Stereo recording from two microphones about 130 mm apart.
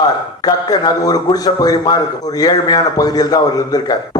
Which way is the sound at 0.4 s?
30° left (ahead or behind).